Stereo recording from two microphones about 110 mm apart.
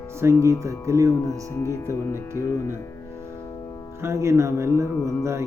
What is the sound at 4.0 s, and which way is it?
Speech, 25° right (ahead or behind).